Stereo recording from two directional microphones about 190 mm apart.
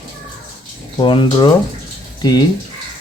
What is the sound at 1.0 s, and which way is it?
Speech, 25° left (ahead or behind).